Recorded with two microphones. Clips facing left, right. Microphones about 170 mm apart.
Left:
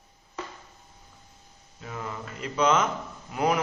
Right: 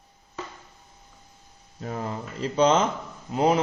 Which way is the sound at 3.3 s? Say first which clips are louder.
Right 4 dB; 25° right (ahead or behind).